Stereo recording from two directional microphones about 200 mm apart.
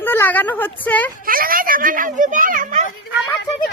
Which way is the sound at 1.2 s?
45° right (ahead or behind).